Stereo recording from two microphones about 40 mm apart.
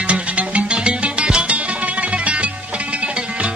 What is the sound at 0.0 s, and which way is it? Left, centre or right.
Music, right.